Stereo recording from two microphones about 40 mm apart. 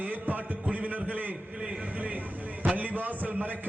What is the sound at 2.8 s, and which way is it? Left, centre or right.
Speech, right.